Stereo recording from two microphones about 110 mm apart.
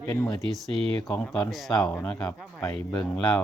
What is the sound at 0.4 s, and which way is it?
Speech, 60° right (ahead or behind).